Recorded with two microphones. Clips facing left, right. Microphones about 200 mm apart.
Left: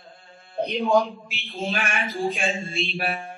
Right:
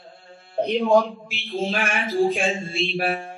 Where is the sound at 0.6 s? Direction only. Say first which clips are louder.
Right 3 dB; centre (ahead or behind).